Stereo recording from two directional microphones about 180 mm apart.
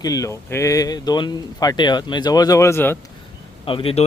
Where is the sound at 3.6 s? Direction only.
30° left (ahead or behind).